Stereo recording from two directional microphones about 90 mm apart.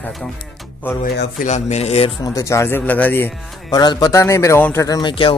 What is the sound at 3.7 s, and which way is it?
Speech, 50° left (ahead or behind).